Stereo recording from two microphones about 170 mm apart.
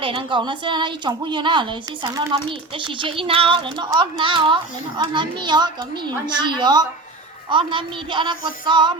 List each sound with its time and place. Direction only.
0.0 s a child's voice: 30° right (ahead or behind)